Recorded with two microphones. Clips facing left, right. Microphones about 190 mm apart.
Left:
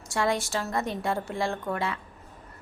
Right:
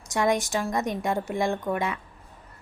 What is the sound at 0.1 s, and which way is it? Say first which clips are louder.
A woman's voice: right 3 dB; 20° right (ahead or behind).